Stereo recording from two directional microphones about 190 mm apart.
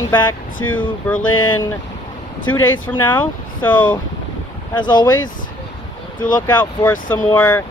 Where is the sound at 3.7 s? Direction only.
25° left (ahead or behind).